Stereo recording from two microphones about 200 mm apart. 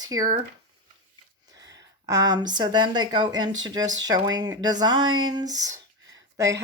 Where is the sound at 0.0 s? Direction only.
20° right (ahead or behind).